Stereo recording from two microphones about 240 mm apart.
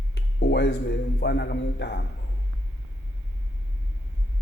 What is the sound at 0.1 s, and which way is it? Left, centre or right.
A man's voice, left.